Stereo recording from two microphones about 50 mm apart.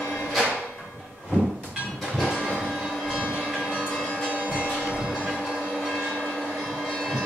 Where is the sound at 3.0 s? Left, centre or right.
Centre.